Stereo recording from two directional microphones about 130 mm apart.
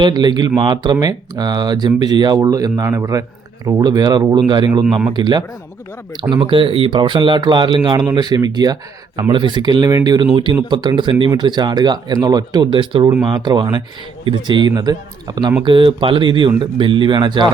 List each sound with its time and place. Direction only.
0.0 s speech: 35° right (ahead or behind)